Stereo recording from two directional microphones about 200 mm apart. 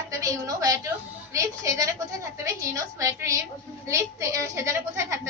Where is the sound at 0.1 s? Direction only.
15° right (ahead or behind).